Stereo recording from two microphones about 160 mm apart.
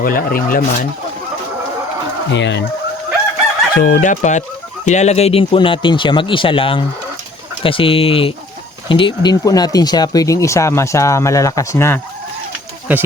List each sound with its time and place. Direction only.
0.0 s speech: 65° left (ahead or behind)
2.3 s speech: 90° left
3.8 s fowl: 60° left (ahead or behind)
4.9 s speech: 45° left (ahead or behind); by 11.9 s 15° left (ahead or behind)